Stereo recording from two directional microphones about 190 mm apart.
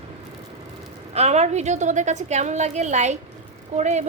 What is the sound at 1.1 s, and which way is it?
A woman's voice, 35° right (ahead or behind).